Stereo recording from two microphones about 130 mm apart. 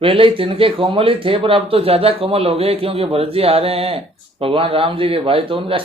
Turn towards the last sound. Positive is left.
turn(degrees=-40)  # may be behind; listen again after turning